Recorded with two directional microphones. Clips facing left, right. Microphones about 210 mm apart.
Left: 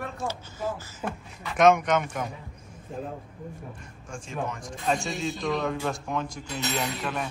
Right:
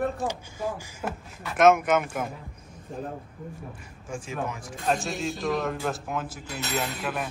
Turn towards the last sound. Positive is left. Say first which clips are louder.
# even
turn(degrees=-5)  # may be behind; listen again after turning